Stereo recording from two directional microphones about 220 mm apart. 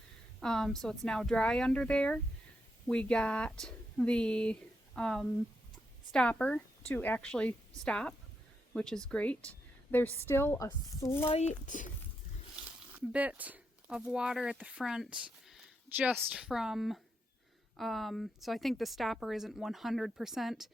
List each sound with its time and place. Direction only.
0.3 s a woman's voice: centre (ahead or behind)
11.3 s speech: 30° left (ahead or behind)
13.1 s a woman's voice: 5° right (ahead or behind)